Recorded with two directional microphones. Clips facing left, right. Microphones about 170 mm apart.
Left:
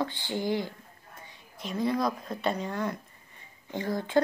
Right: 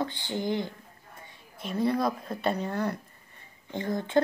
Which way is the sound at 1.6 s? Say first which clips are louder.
Right 2 dB; 55° right (ahead or behind).